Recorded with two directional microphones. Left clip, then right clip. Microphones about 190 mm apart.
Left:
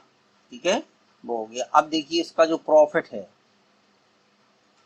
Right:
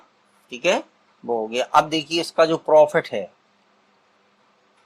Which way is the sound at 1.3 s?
35° right (ahead or behind).